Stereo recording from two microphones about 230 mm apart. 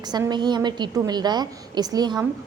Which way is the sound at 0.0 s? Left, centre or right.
Centre.